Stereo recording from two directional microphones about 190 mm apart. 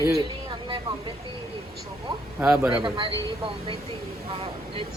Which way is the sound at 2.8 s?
25° right (ahead or behind).